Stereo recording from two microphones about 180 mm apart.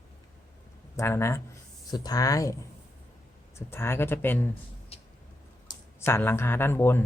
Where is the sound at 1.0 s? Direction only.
15° left (ahead or behind).